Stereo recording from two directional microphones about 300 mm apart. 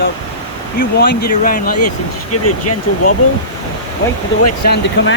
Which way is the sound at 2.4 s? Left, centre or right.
Left.